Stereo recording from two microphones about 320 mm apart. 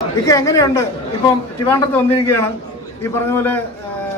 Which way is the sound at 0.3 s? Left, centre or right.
Centre.